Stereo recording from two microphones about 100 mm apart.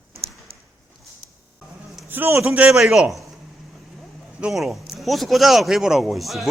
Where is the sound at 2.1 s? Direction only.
20° right (ahead or behind); by 3.3 s 5° right (ahead or behind).